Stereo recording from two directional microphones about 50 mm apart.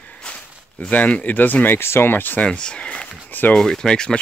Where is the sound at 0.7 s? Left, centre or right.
Left.